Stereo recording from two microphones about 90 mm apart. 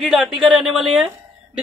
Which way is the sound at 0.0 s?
Centre (ahead or behind).